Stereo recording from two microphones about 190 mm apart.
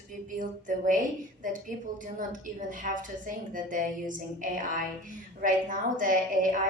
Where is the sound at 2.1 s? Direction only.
45° right (ahead or behind).